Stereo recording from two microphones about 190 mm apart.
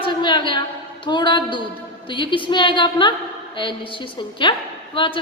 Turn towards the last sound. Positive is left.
turn(degrees=25)  # may be behind; listen again after turning